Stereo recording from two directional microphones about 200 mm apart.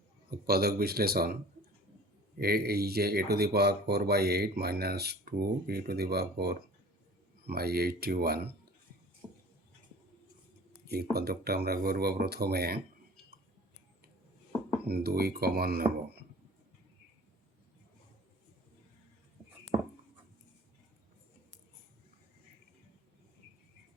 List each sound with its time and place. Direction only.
0.3 s speech: 50° right (ahead or behind)
2.4 s speech: 50° right (ahead or behind)
10.7 s speech: 50° right (ahead or behind)
14.8 s speech: 50° right (ahead or behind)
19.7 s writing: 20° right (ahead or behind)